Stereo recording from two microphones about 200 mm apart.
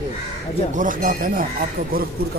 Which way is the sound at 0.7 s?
40° right (ahead or behind).